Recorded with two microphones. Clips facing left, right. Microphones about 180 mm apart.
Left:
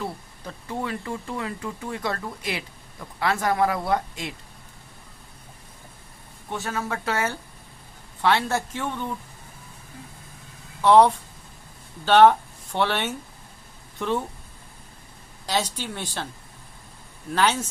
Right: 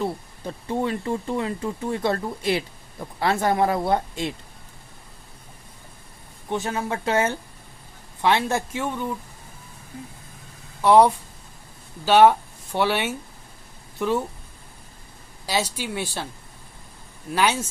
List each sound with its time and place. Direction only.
0.0 s speech: 25° right (ahead or behind)
6.5 s speech: 20° right (ahead or behind)
10.8 s speech: 10° right (ahead or behind)
15.4 s speech: 10° right (ahead or behind)
17.3 s speech: 10° right (ahead or behind)